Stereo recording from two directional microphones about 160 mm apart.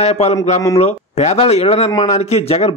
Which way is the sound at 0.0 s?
40° left (ahead or behind).